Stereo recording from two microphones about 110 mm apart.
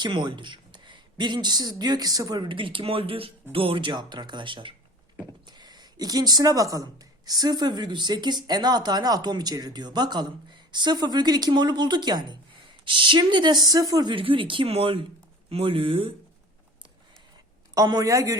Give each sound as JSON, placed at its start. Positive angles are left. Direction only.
{"t": 0.0, "sound": "speech", "side_deg": -45}
{"t": 14.1, "sound": "speech", "side_deg": -50}
{"t": 17.7, "sound": "speech", "side_deg": -35}